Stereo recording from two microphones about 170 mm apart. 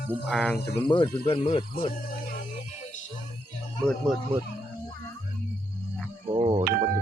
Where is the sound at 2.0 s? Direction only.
55° left (ahead or behind).